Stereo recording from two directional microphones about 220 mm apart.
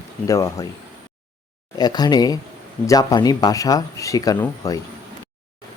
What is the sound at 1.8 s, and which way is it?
Speech, 20° left (ahead or behind).